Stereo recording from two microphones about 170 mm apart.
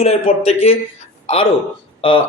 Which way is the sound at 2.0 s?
30° left (ahead or behind).